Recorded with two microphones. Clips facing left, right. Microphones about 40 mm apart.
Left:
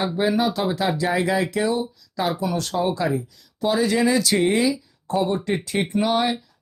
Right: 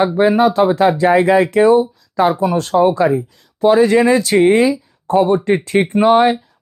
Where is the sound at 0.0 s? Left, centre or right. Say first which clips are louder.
Right 9 dB; right.